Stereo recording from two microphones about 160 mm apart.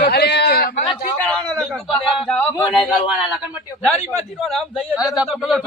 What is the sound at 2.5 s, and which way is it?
Speech, 20° left (ahead or behind).